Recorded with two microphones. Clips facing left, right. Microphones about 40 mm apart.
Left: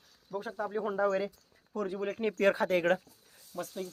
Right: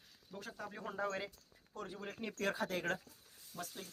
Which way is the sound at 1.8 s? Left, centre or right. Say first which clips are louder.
Left 12 dB; left.